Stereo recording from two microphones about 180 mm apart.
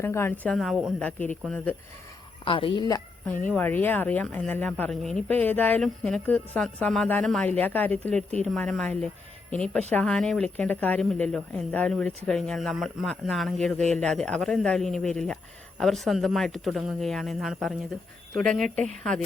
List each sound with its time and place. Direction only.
0.0 s speech: 15° left (ahead or behind)
0.5 s speech: centre (ahead or behind)
2.4 s a woman's voice: 30° left (ahead or behind)
3.2 s speech: 5° left (ahead or behind)